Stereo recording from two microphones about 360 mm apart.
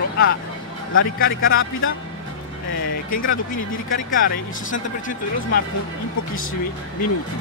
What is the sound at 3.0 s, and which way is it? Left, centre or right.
Speech, left.